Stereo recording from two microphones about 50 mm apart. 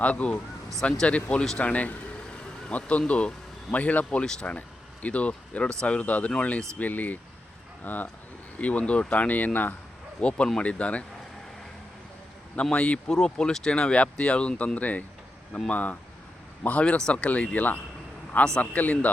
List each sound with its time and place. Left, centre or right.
0.0 s speech: left
10.2 s speech: left
12.7 s speech: left
14.8 s speech: left